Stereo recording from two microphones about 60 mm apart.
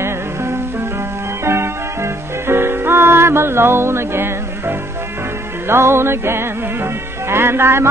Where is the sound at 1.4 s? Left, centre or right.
Right.